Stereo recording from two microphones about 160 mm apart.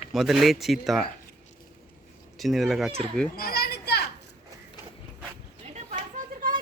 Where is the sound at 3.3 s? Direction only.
70° left (ahead or behind); by 4.0 s 85° left.